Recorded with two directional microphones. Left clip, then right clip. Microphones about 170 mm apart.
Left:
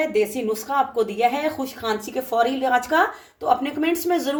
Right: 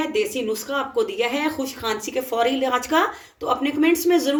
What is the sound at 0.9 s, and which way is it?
Speech, 35° left (ahead or behind).